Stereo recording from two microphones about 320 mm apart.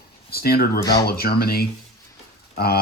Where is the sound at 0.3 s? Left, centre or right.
Left.